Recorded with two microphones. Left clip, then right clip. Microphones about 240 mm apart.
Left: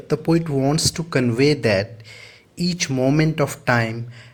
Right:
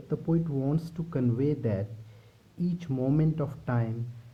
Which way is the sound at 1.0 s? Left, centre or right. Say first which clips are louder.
Left 12 dB; left.